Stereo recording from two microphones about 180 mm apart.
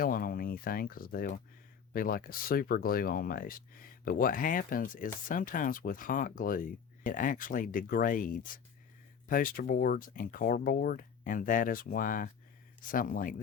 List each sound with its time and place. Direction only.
0.0 s speech: 50° left (ahead or behind)